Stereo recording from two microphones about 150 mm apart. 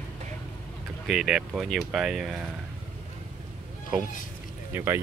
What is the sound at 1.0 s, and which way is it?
Speech, centre (ahead or behind).